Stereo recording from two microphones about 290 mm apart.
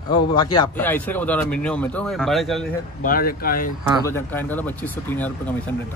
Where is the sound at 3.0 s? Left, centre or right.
Left.